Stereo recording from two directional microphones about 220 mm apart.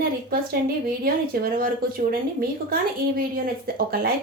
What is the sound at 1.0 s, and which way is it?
A woman's voice, 40° right (ahead or behind).